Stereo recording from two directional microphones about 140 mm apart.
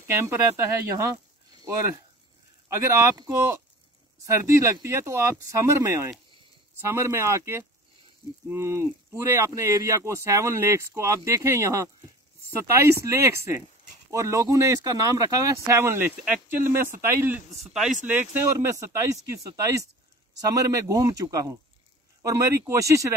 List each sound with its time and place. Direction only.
0.0 s speech: 15° right (ahead or behind)
1.5 s speech: 30° right (ahead or behind)